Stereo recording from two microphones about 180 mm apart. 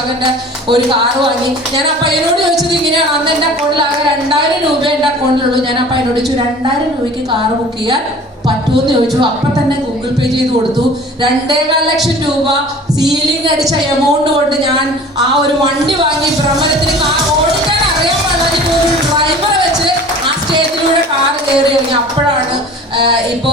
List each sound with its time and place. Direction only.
0.7 s speech: 25° right (ahead or behind)
16.0 s speech: 25° right (ahead or behind)